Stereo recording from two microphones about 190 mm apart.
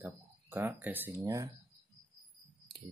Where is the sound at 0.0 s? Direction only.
15° right (ahead or behind).